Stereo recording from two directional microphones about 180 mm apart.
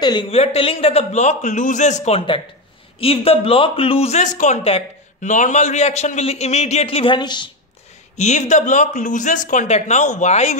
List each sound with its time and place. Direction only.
0.0 s speech: 25° left (ahead or behind)
8.2 s speech: 40° left (ahead or behind)